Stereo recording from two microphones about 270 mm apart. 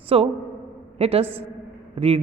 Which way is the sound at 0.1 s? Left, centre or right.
Right.